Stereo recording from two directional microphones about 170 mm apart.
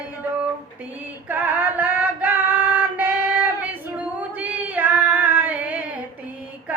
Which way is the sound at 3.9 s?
10° right (ahead or behind).